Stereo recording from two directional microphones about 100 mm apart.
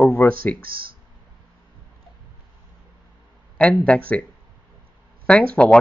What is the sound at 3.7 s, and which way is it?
Speech, 10° left (ahead or behind).